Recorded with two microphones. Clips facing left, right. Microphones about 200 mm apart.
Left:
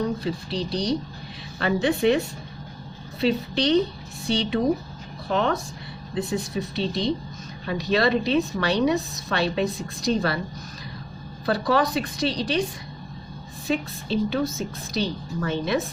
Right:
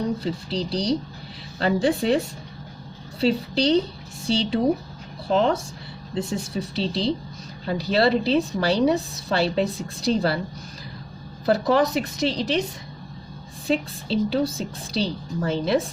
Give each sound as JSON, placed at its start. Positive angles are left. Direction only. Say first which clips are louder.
{"t": 0.2, "sound": "a woman's voice", "louder": "right 1 dB", "side_deg": -30}
{"t": 11.4, "sound": "a woman's voice", "louder": "right 3 dB", "side_deg": -25}
{"t": 13.7, "sound": "a woman's voice", "louder": "right 2 dB", "side_deg": -30}